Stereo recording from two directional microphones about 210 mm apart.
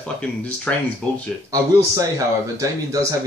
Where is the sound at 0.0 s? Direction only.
5° left (ahead or behind).